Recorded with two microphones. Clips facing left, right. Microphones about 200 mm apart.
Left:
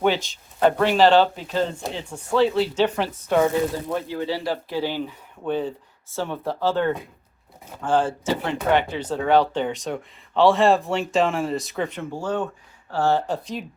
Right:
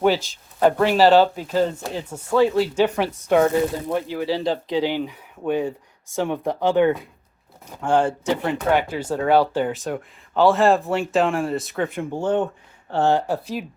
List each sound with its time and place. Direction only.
0.2 s speech: 5° right (ahead or behind)
12.1 s speech: 20° right (ahead or behind); by 13.7 s 5° right (ahead or behind)